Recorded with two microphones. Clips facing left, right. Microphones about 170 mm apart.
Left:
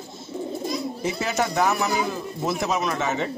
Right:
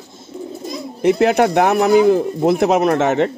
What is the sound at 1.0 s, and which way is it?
Speech, 65° right (ahead or behind).